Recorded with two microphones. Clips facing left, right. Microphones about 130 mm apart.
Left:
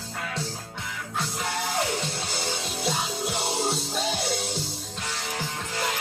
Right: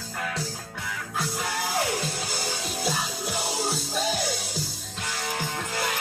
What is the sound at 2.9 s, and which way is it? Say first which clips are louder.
Music: left 1 dB; 30° left (ahead or behind).